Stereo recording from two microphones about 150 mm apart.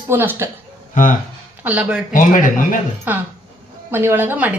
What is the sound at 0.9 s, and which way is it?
Speech, 65° left (ahead or behind).